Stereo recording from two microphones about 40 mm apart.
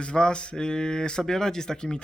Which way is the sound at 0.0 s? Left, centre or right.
Left.